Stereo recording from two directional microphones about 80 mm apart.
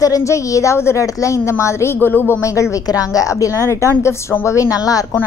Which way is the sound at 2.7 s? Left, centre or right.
Left.